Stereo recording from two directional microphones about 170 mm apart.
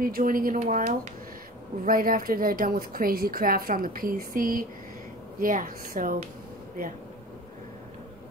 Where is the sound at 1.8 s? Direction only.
55° right (ahead or behind).